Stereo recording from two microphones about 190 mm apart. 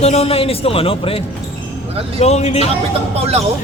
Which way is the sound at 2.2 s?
35° left (ahead or behind).